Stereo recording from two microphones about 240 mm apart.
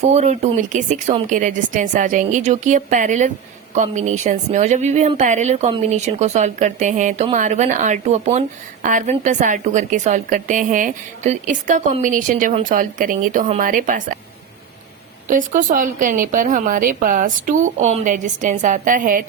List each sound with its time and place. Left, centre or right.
0.0 s a woman's voice: right
15.3 s a woman's voice: right